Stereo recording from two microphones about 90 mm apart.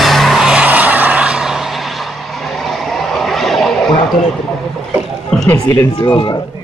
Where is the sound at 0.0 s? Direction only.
Centre (ahead or behind).